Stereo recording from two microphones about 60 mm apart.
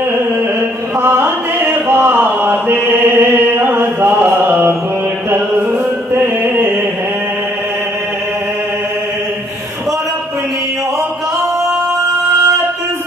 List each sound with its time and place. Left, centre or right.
1.0 s music: right
6.1 s music: right